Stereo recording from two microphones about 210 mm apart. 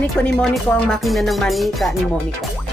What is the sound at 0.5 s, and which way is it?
Speech, centre (ahead or behind).